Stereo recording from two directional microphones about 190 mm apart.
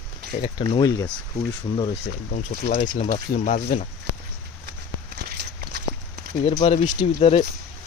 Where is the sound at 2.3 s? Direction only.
40° left (ahead or behind).